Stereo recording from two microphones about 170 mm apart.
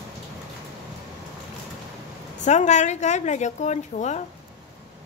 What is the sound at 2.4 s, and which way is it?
A woman's voice, 45° left (ahead or behind).